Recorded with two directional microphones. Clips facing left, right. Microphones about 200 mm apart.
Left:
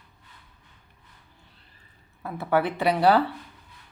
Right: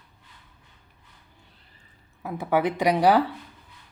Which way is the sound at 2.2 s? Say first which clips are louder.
Right 1 dB; 15° right (ahead or behind).